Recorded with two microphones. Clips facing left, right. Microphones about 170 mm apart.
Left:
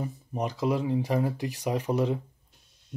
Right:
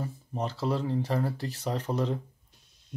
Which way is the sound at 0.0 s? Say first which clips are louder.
Left 2 dB; 15° left (ahead or behind).